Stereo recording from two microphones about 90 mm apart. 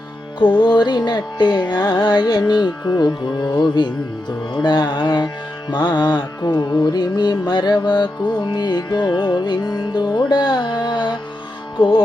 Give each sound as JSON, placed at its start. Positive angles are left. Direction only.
{"t": 0.3, "sound": "music", "side_deg": 60}